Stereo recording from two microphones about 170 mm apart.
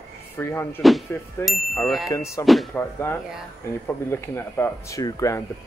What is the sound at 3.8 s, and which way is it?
Speech, 15° left (ahead or behind).